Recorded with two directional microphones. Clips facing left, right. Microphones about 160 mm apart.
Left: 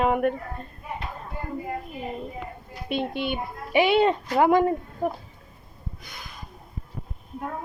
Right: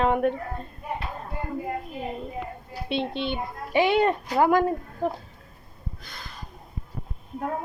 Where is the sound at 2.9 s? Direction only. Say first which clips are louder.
Left 1 dB; 10° left (ahead or behind).